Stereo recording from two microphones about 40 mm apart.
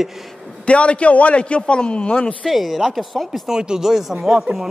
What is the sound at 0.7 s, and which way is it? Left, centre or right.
Speech, left.